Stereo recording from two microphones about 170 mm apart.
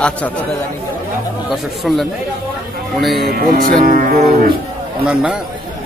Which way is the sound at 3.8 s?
50° right (ahead or behind).